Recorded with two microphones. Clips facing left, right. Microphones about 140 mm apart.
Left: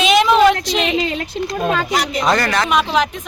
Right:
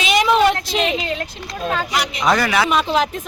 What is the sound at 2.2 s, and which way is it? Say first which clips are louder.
Speech: right 2 dB; 5° right (ahead or behind).